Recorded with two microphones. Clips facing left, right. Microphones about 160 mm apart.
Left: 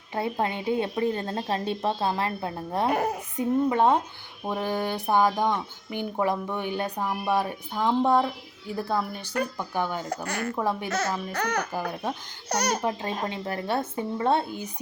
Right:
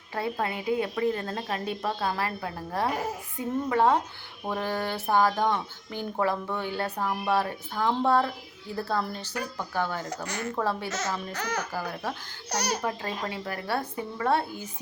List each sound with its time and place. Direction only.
0.1 s a woman's voice: 20° left (ahead or behind)
10.2 s a child's voice: 55° left (ahead or behind)
10.6 s speech: 15° left (ahead or behind)
10.8 s a child's voice: 60° left (ahead or behind)
11.7 s a woman's voice: 20° left (ahead or behind)
12.5 s speech: 55° left (ahead or behind)
12.8 s a woman's voice: 20° left (ahead or behind)